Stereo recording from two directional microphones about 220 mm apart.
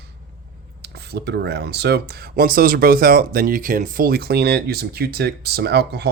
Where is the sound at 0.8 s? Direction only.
45° right (ahead or behind).